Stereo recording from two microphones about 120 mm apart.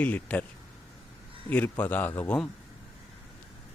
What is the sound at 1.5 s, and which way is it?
Speech, 15° left (ahead or behind).